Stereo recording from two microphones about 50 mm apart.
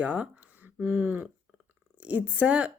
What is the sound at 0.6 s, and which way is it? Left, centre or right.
A woman's voice, right.